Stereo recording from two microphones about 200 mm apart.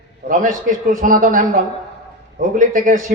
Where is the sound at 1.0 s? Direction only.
45° right (ahead or behind).